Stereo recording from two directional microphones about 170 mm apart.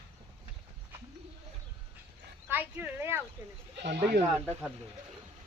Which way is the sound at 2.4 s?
10° right (ahead or behind).